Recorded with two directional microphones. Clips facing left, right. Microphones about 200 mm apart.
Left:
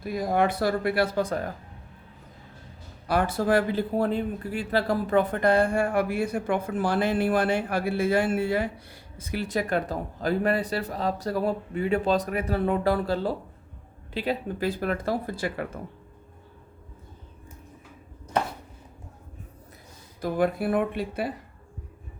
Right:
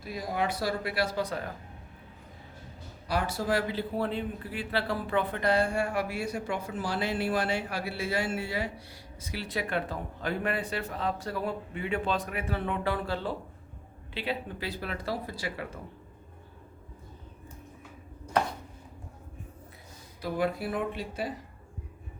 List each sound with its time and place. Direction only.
0.0 s speech: 50° left (ahead or behind)
3.1 s speech: 55° left (ahead or behind)
20.2 s speech: 50° left (ahead or behind)